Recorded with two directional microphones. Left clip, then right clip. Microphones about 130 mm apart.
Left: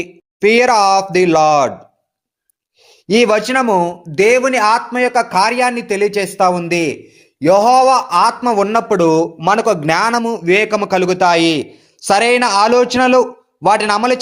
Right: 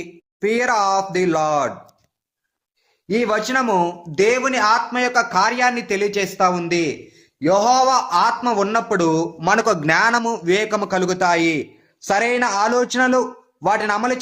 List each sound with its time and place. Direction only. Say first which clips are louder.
0.0 s speech: left 9 dB; 40° left (ahead or behind)
3.1 s speech: left 7 dB; 40° left (ahead or behind)